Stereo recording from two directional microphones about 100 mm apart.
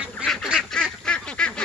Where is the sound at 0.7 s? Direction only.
10° left (ahead or behind).